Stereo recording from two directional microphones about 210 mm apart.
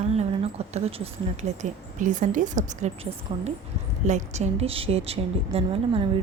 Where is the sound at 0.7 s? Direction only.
30° right (ahead or behind).